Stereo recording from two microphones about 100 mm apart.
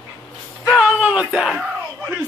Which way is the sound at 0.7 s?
10° right (ahead or behind).